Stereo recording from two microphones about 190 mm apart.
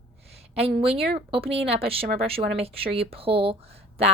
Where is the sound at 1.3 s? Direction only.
30° right (ahead or behind).